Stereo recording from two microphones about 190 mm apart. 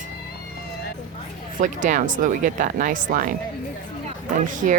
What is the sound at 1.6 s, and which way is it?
Speech, 40° right (ahead or behind).